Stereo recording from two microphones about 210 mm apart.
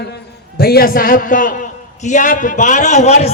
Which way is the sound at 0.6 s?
45° left (ahead or behind).